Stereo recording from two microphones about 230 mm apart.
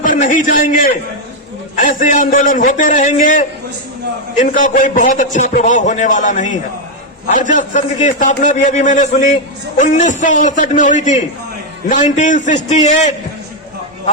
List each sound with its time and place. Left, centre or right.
0.0 s a man's voice: left
4.4 s a man's voice: left